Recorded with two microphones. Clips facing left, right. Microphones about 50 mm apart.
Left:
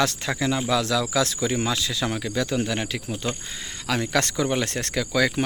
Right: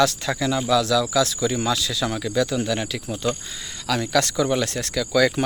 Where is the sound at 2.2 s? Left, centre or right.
Centre.